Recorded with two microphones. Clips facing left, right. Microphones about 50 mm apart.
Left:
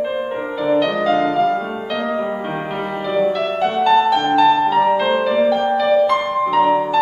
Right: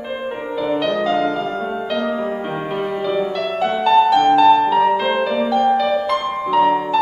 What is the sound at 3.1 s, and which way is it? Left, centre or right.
Music, centre.